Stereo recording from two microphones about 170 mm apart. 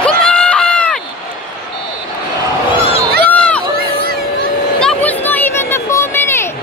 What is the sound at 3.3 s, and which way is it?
Run, 5° left (ahead or behind).